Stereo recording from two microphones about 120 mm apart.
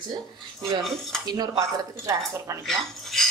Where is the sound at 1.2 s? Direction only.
35° right (ahead or behind).